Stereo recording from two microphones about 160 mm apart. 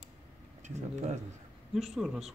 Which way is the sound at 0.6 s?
45° right (ahead or behind).